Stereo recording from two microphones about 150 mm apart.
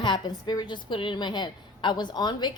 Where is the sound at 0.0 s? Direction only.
30° left (ahead or behind).